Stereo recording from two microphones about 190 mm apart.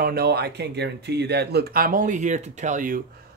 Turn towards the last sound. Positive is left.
turn(degrees=-45)  # may be behind; listen again after turning